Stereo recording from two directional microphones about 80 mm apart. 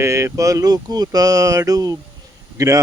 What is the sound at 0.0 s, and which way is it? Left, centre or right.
A man's voice, right.